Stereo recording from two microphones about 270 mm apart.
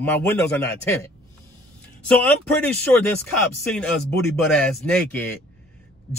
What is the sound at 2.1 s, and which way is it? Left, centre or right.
Speech, centre.